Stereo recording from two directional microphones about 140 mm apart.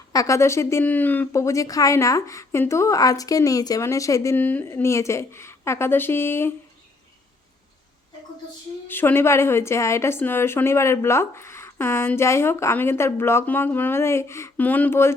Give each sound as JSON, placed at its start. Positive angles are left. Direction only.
{"t": 0.1, "sound": "speech", "side_deg": 25}
{"t": 8.9, "sound": "a woman's voice", "side_deg": 15}